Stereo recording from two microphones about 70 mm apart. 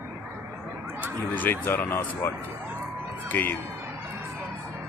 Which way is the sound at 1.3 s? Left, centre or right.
Left.